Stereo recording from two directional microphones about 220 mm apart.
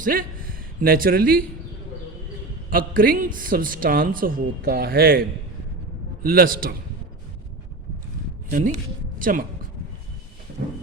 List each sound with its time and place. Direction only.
0.0 s speech: 40° right (ahead or behind)
2.6 s a man's voice: 40° right (ahead or behind)
6.2 s a man's voice: 40° right (ahead or behind)
8.4 s speech: 35° right (ahead or behind)
10.6 s a man's voice: 40° right (ahead or behind)